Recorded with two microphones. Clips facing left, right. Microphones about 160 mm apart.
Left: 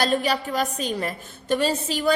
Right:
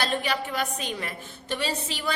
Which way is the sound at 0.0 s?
40° left (ahead or behind).